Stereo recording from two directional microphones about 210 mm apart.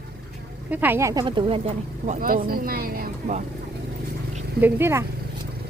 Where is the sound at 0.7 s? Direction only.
10° right (ahead or behind); by 2.1 s 30° right (ahead or behind).